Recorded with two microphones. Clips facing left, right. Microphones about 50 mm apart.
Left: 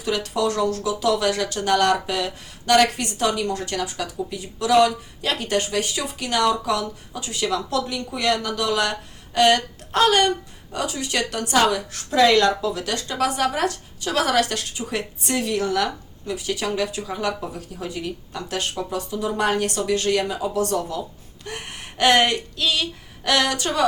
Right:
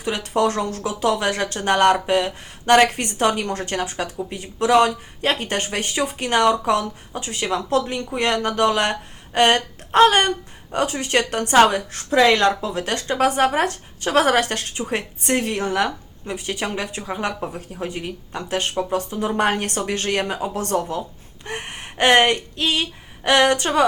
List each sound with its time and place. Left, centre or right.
0.0 s speech: right